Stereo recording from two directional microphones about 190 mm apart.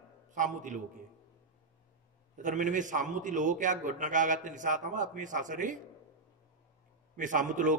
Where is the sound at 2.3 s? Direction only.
40° right (ahead or behind).